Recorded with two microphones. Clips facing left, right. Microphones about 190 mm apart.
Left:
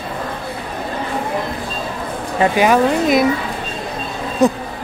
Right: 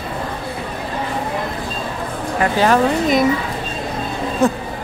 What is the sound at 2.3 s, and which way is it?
Speech, 15° left (ahead or behind).